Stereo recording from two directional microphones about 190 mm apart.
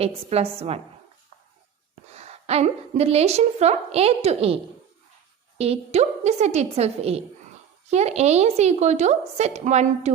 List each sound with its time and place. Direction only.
0.3 s a woman's voice: 35° right (ahead or behind)
2.1 s a woman's voice: 35° right (ahead or behind)
5.5 s a woman's voice: 30° right (ahead or behind)